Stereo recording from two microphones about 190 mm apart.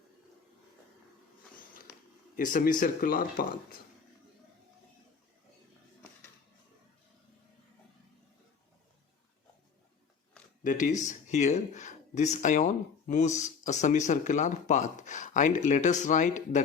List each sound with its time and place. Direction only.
2.3 s speech: 45° left (ahead or behind)
10.6 s speech: 45° left (ahead or behind)